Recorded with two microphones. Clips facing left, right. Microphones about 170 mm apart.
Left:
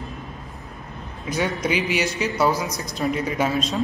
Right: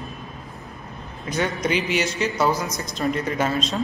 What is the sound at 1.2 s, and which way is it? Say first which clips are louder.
A man's voice: even; 5° left (ahead or behind).